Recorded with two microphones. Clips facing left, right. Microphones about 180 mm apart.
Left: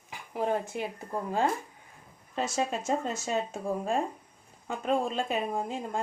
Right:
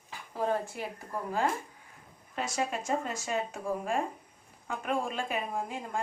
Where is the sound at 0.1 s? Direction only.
20° left (ahead or behind).